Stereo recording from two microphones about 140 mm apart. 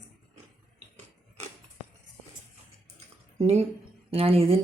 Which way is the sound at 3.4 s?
50° right (ahead or behind).